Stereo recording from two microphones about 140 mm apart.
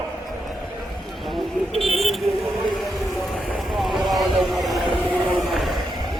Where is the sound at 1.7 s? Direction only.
40° right (ahead or behind).